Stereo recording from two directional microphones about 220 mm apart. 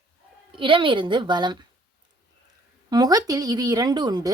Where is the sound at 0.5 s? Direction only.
20° right (ahead or behind).